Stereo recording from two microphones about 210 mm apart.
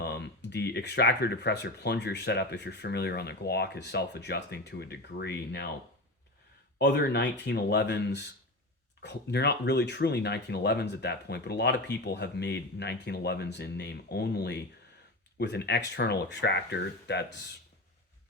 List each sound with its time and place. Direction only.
0.0 s speech: 55° left (ahead or behind)
6.7 s speech: 50° left (ahead or behind)